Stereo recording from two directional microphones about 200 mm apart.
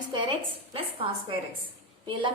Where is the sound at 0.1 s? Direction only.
25° right (ahead or behind).